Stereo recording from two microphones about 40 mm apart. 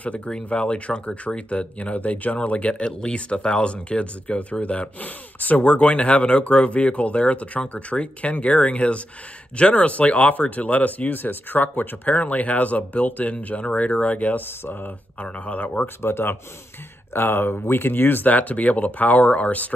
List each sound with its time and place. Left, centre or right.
0.0 s speech: left
2.7 s speech: left
16.0 s speech: left
18.2 s speech: left